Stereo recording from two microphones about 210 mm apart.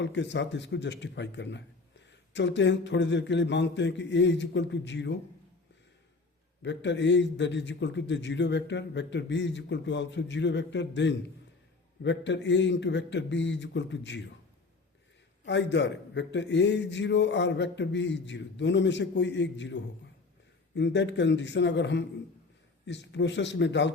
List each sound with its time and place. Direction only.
0.0 s a man's voice: 60° left (ahead or behind)
6.6 s a man's voice: 55° left (ahead or behind)
15.4 s a man's voice: 55° left (ahead or behind)